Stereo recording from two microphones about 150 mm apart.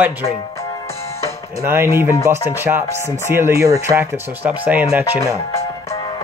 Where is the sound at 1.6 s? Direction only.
15° right (ahead or behind).